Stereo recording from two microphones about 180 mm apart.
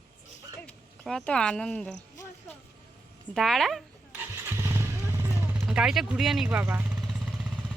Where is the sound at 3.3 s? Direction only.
Centre (ahead or behind).